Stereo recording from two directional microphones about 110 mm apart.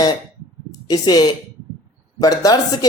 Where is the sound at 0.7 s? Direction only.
35° left (ahead or behind).